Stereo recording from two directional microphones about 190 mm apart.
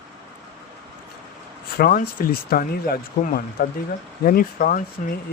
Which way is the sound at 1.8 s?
50° left (ahead or behind).